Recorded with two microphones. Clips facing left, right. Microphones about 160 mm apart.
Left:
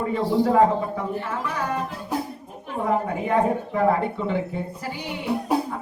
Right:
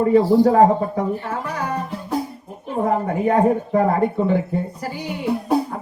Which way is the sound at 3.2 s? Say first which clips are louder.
Right 6 dB; 40° right (ahead or behind).